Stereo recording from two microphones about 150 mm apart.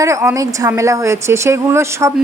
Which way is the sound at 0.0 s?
20° right (ahead or behind).